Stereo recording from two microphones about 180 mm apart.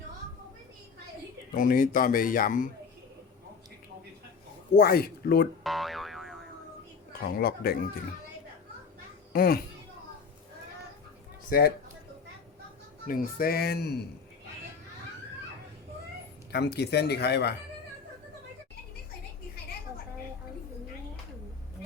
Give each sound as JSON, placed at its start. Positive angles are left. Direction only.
{"t": 1.5, "sound": "speech", "side_deg": 50}
{"t": 4.7, "sound": "speech", "side_deg": 60}
{"t": 5.6, "sound": "boing", "side_deg": 0}
{"t": 7.1, "sound": "speech", "side_deg": 60}
{"t": 9.3, "sound": "a child's voice", "side_deg": 55}
{"t": 11.4, "sound": "speech", "side_deg": 55}
{"t": 13.1, "sound": "speech", "side_deg": 55}
{"t": 16.5, "sound": "speech", "side_deg": 65}